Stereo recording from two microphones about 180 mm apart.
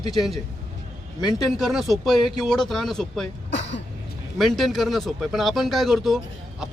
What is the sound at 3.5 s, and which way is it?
Throat clearing, 90° left.